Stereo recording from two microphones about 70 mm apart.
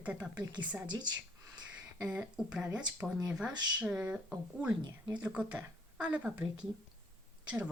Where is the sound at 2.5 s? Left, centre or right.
Centre.